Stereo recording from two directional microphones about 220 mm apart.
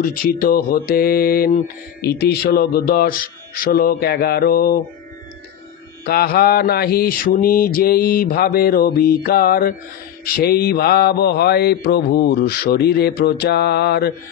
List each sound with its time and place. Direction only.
0.0 s mantra: 40° left (ahead or behind)
6.0 s mantra: 45° left (ahead or behind)